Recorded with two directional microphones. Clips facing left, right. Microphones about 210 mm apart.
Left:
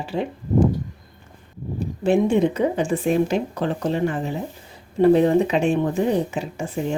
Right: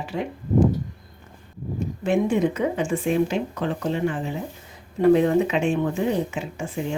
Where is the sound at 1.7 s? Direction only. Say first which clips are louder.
Left 3 dB; 30° left (ahead or behind).